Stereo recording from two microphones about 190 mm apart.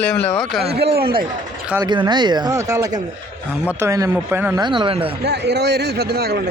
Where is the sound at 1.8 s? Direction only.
25° right (ahead or behind).